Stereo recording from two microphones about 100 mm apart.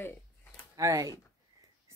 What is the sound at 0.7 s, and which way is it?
Speech, 35° right (ahead or behind).